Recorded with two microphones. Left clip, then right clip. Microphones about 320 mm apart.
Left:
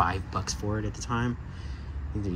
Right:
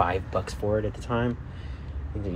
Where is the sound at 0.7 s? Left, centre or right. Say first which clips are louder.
Right 7 dB; right.